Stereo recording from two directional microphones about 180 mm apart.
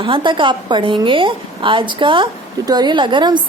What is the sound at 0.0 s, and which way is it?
A woman's voice, 25° right (ahead or behind).